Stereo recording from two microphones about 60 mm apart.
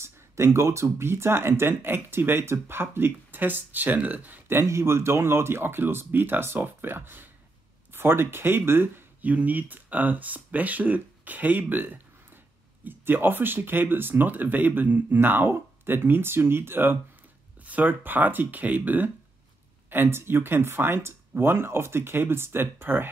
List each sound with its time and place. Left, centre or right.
0.0 s speech: right
4.6 s speech: right
9.2 s speech: right
19.9 s speech: right